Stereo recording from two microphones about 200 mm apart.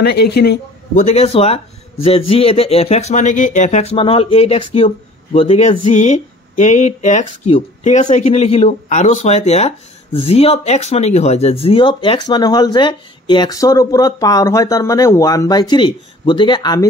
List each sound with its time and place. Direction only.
0.0 s a man's voice: 55° left (ahead or behind)
0.9 s speech: 35° left (ahead or behind)